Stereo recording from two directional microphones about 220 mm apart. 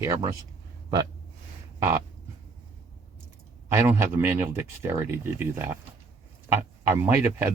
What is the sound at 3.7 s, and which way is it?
Speech, 10° right (ahead or behind).